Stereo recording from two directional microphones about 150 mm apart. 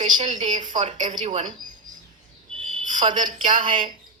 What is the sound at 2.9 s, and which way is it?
Speech, 55° right (ahead or behind).